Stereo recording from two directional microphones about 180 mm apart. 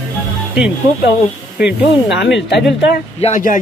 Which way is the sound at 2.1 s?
75° left (ahead or behind).